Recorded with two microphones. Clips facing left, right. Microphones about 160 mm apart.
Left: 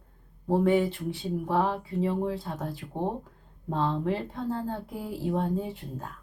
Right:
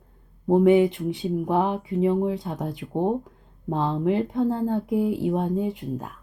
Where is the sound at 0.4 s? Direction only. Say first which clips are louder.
Right 6 dB; 20° right (ahead or behind).